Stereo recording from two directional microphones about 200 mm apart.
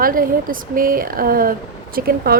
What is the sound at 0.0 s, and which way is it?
A woman's voice, 45° right (ahead or behind).